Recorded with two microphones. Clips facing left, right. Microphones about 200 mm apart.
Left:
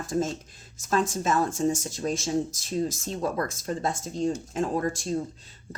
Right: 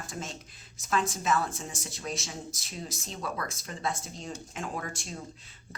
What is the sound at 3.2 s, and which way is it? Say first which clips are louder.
Speech: left 8 dB; 45° left (ahead or behind).